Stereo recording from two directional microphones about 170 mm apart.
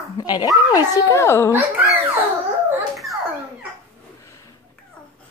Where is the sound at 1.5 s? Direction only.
10° right (ahead or behind).